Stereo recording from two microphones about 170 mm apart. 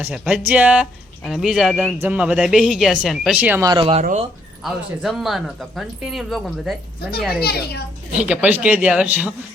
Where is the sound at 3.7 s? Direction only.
30° right (ahead or behind).